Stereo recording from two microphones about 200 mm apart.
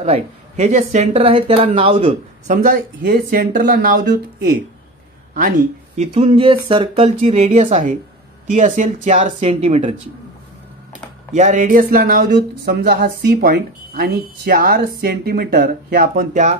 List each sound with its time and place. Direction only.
0.0 s speech: 30° right (ahead or behind)
5.3 s speech: 40° right (ahead or behind)
11.3 s speech: 40° right (ahead or behind)